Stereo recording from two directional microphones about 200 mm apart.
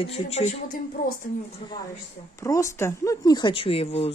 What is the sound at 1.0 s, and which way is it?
Speech, 45° left (ahead or behind).